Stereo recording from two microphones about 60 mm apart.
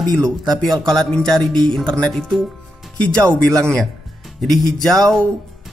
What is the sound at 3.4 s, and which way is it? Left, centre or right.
Speech, right.